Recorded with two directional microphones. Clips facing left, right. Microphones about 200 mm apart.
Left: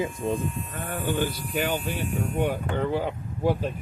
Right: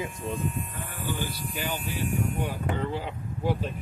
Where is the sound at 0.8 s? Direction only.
60° left (ahead or behind).